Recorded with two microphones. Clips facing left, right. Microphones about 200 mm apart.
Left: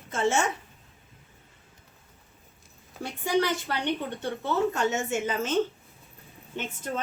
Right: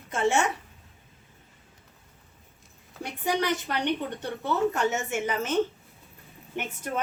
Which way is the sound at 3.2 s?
15° right (ahead or behind).